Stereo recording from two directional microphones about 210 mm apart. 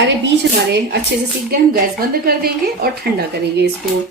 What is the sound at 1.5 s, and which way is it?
A woman's voice, 45° right (ahead or behind).